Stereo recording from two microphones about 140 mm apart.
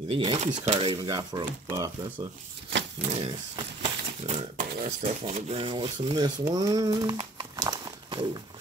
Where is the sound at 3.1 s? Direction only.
35° right (ahead or behind).